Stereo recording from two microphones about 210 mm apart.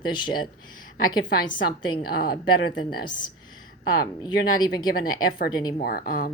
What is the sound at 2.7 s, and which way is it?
Speech, 20° left (ahead or behind).